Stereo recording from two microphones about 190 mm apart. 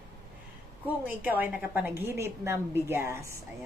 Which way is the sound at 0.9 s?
10° right (ahead or behind).